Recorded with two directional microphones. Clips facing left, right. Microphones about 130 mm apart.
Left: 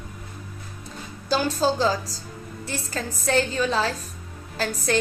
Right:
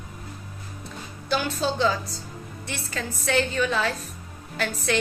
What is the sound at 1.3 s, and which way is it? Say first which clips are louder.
A woman's voice: left 3 dB; 35° left (ahead or behind).